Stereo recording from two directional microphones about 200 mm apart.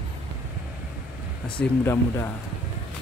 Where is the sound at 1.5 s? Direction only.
10° left (ahead or behind).